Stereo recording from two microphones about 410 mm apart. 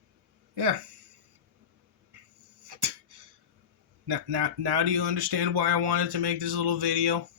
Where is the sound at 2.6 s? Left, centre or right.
Right.